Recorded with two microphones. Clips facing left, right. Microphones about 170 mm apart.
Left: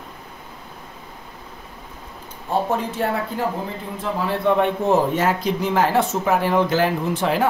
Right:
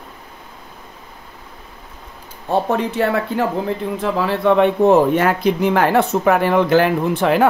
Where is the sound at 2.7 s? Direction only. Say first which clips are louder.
Right 5 dB; 70° right (ahead or behind).